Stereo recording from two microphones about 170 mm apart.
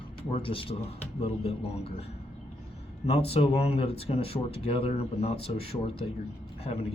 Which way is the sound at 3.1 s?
35° left (ahead or behind).